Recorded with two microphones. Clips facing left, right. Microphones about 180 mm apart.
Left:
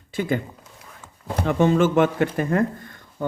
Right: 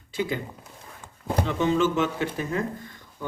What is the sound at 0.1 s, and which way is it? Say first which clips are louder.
Speech: left 4 dB; 50° left (ahead or behind).